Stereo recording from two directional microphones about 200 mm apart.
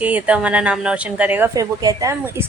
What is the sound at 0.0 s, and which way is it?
A woman's voice, 5° right (ahead or behind).